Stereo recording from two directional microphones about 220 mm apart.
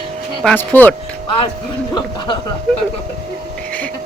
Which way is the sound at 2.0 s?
20° left (ahead or behind).